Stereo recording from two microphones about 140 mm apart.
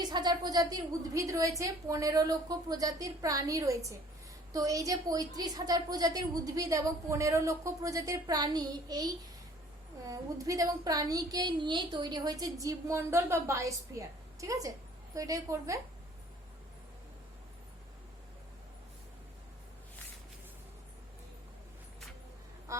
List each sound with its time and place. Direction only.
0.0 s a woman's voice: 30° right (ahead or behind)
22.7 s speech: 20° right (ahead or behind)